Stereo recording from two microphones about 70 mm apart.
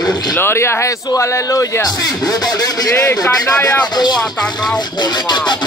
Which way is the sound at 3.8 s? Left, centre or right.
Left.